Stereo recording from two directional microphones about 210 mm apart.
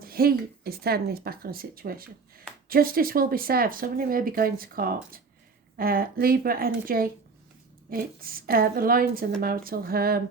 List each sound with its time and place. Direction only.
0.0 s speech: 45° right (ahead or behind)